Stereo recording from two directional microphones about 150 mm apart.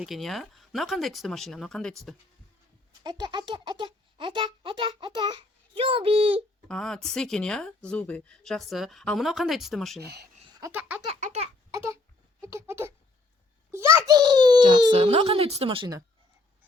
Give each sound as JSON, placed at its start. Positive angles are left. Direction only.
{"t": 0.0, "sound": "speech", "side_deg": 0}
{"t": 3.0, "sound": "speech", "side_deg": -30}
{"t": 6.7, "sound": "speech", "side_deg": 5}
{"t": 10.0, "sound": "speech", "side_deg": -90}
{"t": 10.6, "sound": "a sound", "side_deg": -10}
{"t": 11.0, "sound": "a sound", "side_deg": -45}
{"t": 11.7, "sound": "a sound", "side_deg": -20}
{"t": 12.4, "sound": "a child's voice", "side_deg": -20}
{"t": 14.9, "sound": "speech", "side_deg": -40}